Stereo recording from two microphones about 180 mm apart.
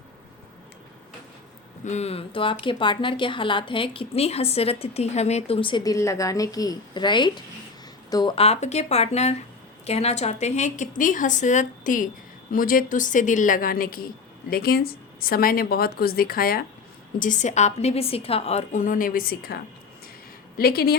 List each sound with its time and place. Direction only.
1.8 s a woman's voice: 40° left (ahead or behind); by 16.6 s 55° left (ahead or behind)
17.2 s a woman's voice: 45° left (ahead or behind)
20.6 s a woman's voice: 60° left (ahead or behind)